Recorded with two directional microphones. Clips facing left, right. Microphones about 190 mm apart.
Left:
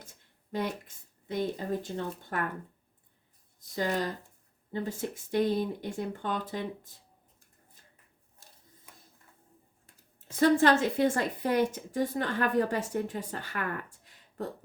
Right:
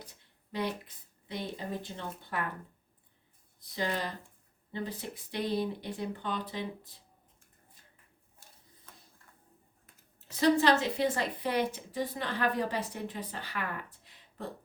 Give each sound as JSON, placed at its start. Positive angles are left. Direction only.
{"t": 0.5, "sound": "a woman's voice", "side_deg": 50}
{"t": 3.6, "sound": "a woman's voice", "side_deg": 45}
{"t": 8.9, "sound": "printer", "side_deg": 10}
{"t": 10.2, "sound": "a woman's voice", "side_deg": 50}